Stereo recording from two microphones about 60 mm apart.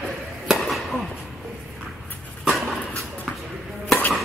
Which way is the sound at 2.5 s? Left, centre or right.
Centre.